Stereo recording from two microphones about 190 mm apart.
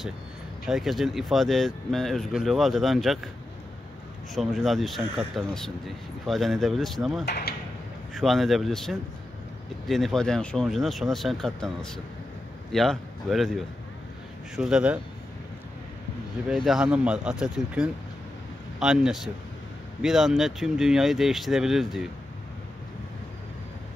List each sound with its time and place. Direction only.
0.7 s speech: centre (ahead or behind)
4.4 s speech: centre (ahead or behind)
7.2 s speech: 55° left (ahead or behind)
8.1 s speech: centre (ahead or behind)
16.4 s speech: centre (ahead or behind)